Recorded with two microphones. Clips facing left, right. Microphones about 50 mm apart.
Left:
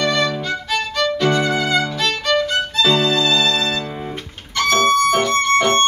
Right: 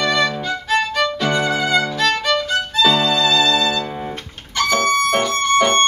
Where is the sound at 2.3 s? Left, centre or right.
Centre.